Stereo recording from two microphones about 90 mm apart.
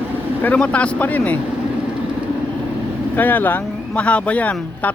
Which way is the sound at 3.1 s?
20° left (ahead or behind).